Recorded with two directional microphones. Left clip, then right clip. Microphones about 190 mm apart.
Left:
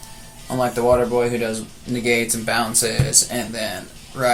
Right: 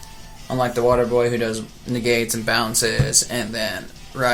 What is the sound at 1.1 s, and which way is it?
Speech, 50° right (ahead or behind).